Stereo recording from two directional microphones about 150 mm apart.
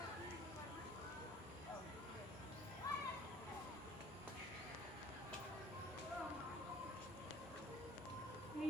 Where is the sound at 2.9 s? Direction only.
25° left (ahead or behind).